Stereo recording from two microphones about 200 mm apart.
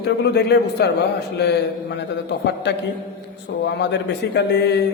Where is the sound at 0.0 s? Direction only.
55° left (ahead or behind).